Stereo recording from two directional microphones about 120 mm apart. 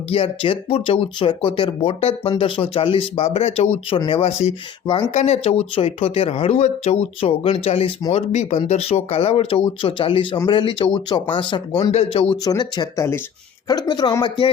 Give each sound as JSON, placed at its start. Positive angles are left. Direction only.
{"t": 0.1, "sound": "speech", "side_deg": 50}
{"t": 3.8, "sound": "speech", "side_deg": 45}
{"t": 4.3, "sound": "speech", "side_deg": 60}
{"t": 8.1, "sound": "speech", "side_deg": 70}
{"t": 11.8, "sound": "speech", "side_deg": 55}
{"t": 12.5, "sound": "a man's voice", "side_deg": 35}
{"t": 13.0, "sound": "speech", "side_deg": 20}
{"t": 13.7, "sound": "a man's voice", "side_deg": 35}